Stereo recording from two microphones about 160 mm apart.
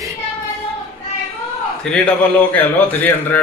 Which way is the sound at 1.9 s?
10° left (ahead or behind).